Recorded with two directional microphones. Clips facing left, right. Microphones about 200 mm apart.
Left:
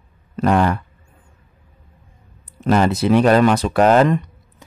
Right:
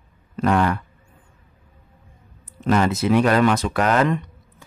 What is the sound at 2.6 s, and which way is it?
Speech, 35° left (ahead or behind).